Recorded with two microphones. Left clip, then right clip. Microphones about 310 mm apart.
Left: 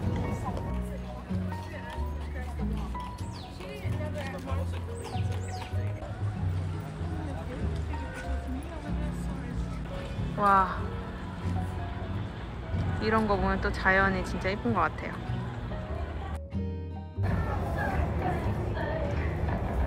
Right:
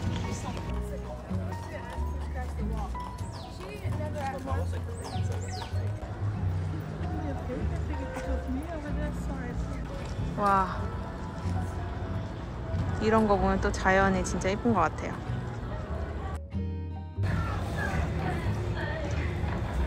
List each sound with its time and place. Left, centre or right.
10.4 s speech: centre
13.0 s speech: centre
17.8 s music: left
18.8 s horse: left